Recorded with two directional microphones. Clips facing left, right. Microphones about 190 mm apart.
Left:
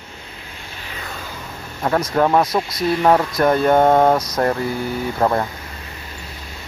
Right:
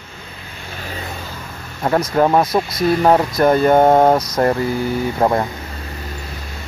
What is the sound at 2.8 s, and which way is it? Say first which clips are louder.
Speech: right 4 dB; 45° right (ahead or behind).